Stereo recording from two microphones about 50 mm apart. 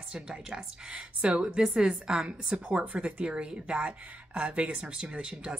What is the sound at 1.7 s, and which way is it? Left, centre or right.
Speech, centre.